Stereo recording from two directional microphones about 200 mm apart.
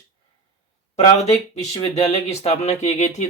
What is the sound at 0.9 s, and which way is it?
Speech, 35° left (ahead or behind).